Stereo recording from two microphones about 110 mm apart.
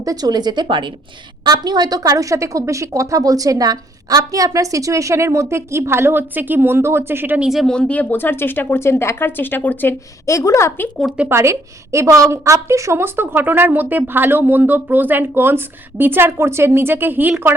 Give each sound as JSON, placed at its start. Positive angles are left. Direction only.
{"t": 0.0, "sound": "a woman's voice", "side_deg": -35}
{"t": 7.4, "sound": "speech", "side_deg": 0}
{"t": 7.8, "sound": "speech", "side_deg": 10}
{"t": 11.2, "sound": "a woman's voice", "side_deg": -25}